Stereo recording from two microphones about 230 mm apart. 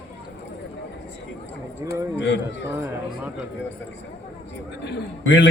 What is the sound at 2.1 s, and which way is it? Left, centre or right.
Speech, left.